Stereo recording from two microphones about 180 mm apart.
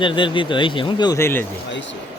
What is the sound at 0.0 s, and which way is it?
Speech, 25° left (ahead or behind).